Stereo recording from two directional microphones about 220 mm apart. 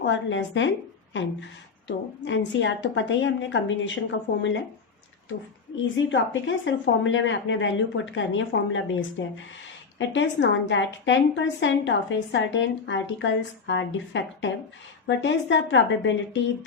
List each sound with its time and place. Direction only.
0.0 s a woman's voice: 55° left (ahead or behind)
6.1 s a woman's voice: 60° left (ahead or behind)